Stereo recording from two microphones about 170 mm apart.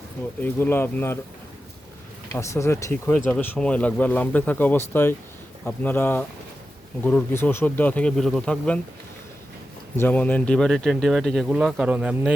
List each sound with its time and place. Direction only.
0.4 s speech: 15° left (ahead or behind)
2.3 s speech: 15° left (ahead or behind)
10.0 s speech: 10° left (ahead or behind); by 12.3 s 5° right (ahead or behind)